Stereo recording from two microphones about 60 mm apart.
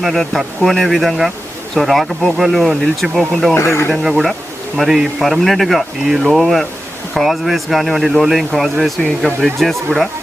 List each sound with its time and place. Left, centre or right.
0.0 s speech: centre
3.5 s speech: left
3.9 s speech: centre